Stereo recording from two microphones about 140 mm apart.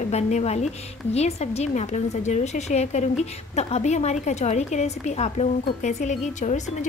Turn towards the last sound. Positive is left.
turn(degrees=55)  # may be behind; listen again after turning